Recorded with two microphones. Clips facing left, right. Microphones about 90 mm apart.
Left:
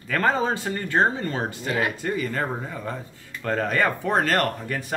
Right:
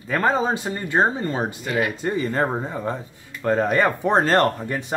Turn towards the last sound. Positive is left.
turn(degrees=-25)  # may be behind; listen again after turning